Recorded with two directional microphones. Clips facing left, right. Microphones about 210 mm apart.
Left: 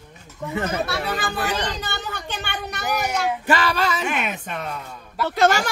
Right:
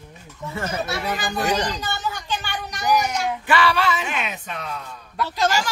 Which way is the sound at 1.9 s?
60° left (ahead or behind).